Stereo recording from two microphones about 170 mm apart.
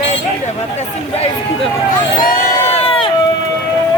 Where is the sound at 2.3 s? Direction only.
40° left (ahead or behind).